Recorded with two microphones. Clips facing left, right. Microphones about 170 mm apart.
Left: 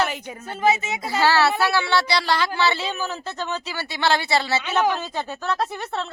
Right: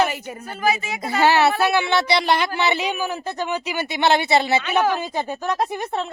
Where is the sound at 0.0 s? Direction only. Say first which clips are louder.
Right 3 dB; 10° right (ahead or behind).